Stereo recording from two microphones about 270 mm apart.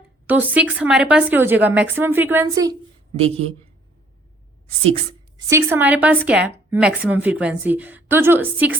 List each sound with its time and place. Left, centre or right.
0.3 s speech: centre
3.2 s a man's voice: right
5.5 s speech: centre